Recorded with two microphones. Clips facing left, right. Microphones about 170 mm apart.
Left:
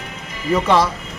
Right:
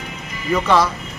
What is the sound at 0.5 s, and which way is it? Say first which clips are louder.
Speech: left 1 dB; 25° left (ahead or behind).